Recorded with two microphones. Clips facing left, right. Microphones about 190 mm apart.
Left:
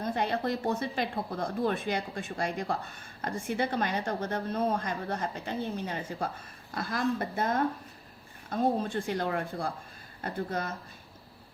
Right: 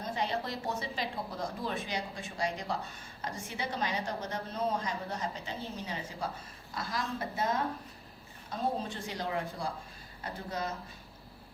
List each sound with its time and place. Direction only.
0.0 s speech: 55° left (ahead or behind)